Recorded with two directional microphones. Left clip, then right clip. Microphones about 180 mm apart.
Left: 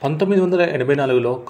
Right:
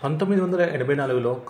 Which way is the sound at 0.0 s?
25° left (ahead or behind).